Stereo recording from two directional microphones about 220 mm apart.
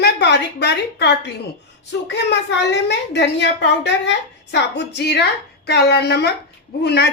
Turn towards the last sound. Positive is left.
turn(degrees=50)  # may be behind; listen again after turning